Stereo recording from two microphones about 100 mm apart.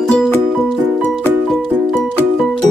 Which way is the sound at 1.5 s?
Centre (ahead or behind).